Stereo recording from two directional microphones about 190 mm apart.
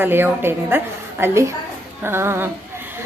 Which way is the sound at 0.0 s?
10° right (ahead or behind).